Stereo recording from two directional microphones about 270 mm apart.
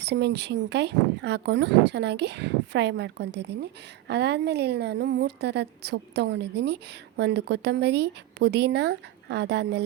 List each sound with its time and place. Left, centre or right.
0.0 s a woman's voice: right